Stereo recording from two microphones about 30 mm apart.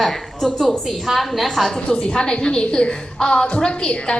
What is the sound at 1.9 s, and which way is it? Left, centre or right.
A woman's voice, left.